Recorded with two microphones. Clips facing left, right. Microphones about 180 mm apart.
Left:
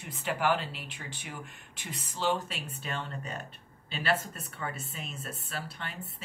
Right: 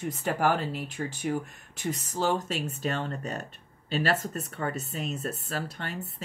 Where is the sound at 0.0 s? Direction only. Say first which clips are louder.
Right 4 dB; 40° right (ahead or behind).